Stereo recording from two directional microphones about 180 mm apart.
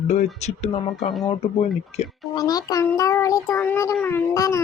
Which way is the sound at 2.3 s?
20° left (ahead or behind).